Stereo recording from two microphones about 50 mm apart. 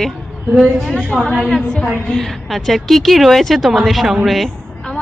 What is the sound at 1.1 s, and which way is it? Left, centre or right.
A woman's voice, centre.